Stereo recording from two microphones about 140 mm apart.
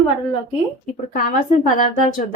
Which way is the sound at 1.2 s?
75° left (ahead or behind).